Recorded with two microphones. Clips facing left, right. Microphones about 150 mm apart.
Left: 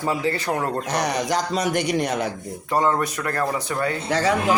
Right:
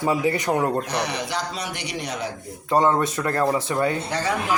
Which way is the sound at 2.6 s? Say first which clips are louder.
Right 2 dB; 20° right (ahead or behind).